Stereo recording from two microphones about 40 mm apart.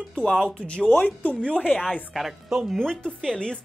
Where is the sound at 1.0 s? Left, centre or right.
Left.